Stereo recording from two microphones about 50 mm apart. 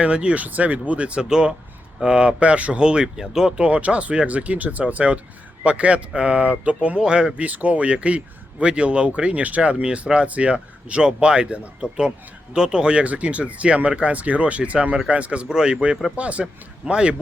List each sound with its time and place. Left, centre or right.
0.0 s speech: right
3.6 s speech: right
7.0 s speech: centre
7.4 s speech: right